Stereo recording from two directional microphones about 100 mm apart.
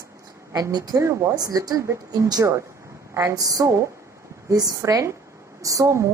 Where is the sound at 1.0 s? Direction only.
30° right (ahead or behind).